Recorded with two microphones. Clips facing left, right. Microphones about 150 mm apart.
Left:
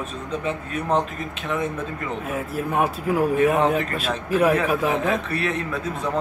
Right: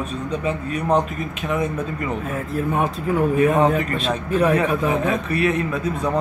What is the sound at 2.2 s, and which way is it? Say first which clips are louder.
Speech: right 2 dB; centre (ahead or behind).